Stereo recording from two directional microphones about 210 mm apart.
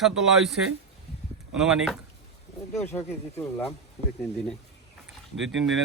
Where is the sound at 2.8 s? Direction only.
10° left (ahead or behind).